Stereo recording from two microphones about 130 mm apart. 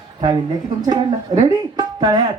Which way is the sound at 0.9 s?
30° right (ahead or behind).